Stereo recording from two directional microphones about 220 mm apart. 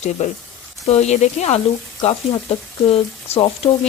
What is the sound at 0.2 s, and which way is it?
Speech, 30° left (ahead or behind).